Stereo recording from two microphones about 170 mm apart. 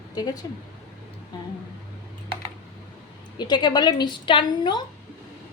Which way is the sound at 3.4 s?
25° left (ahead or behind).